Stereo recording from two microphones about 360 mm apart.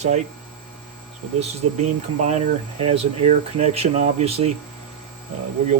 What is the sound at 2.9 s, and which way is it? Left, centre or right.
Speech, centre.